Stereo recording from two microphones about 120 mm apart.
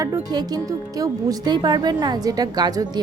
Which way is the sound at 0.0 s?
30° right (ahead or behind).